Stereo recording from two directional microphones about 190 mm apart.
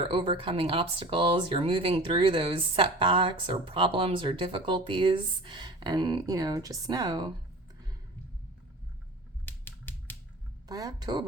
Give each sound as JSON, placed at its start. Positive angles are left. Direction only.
{"t": 0.0, "sound": "speech", "side_deg": -25}
{"t": 9.5, "sound": "typewriter", "side_deg": 10}
{"t": 10.7, "sound": "speech", "side_deg": -20}